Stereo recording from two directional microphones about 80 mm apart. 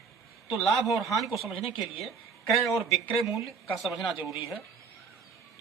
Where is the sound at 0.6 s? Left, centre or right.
Centre.